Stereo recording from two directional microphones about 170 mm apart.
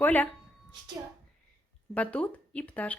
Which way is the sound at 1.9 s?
5° left (ahead or behind).